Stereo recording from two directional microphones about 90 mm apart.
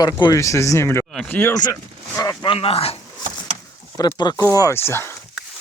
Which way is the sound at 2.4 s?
85° left.